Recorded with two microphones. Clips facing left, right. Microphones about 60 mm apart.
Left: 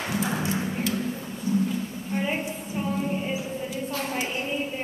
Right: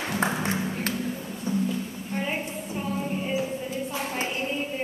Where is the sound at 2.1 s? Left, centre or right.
Centre.